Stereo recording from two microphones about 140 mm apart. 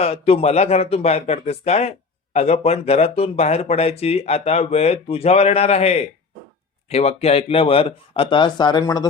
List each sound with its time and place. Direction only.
0.0 s speech: 45° left (ahead or behind); by 9.0 s 30° left (ahead or behind)